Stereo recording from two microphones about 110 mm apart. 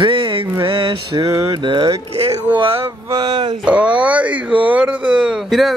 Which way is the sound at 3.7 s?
10° right (ahead or behind).